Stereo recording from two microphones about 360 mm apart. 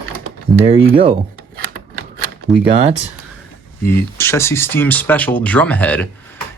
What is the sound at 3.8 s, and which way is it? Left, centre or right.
Speech, centre.